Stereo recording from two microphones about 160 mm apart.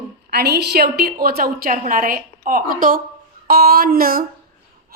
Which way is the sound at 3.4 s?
70° right (ahead or behind).